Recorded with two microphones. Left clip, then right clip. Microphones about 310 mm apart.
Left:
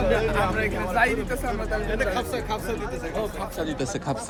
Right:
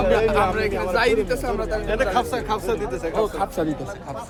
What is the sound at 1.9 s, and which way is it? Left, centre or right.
Speech, right.